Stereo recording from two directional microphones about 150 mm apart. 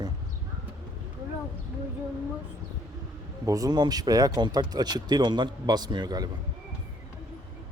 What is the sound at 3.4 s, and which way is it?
Speech, 25° right (ahead or behind).